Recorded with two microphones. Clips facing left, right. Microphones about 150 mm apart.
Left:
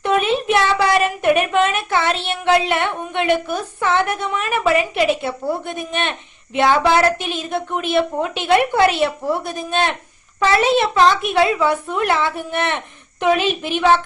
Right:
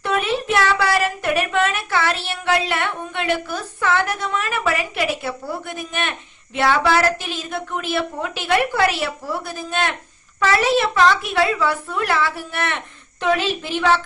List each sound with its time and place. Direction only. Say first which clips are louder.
0.0 s a woman's voice: left 4 dB; 20° left (ahead or behind)